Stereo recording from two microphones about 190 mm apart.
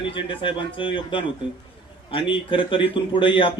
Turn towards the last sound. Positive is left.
turn(degrees=25)  # may be behind; listen again after turning